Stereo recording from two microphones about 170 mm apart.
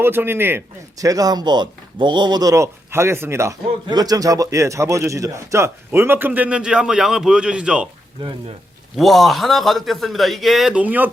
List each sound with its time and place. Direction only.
0.0 s speech: 15° right (ahead or behind)
9.0 s a man's voice: centre (ahead or behind)